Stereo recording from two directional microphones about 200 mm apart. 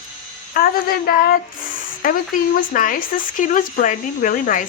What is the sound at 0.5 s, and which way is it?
Speech, 45° left (ahead or behind).